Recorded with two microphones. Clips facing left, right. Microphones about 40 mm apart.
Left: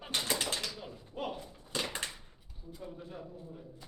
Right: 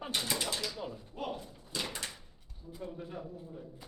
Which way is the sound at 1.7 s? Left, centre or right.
Left.